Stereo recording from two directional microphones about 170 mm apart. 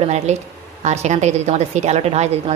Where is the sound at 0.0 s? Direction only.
40° right (ahead or behind).